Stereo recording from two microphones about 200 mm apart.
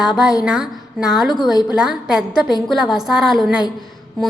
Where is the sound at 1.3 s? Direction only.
20° left (ahead or behind).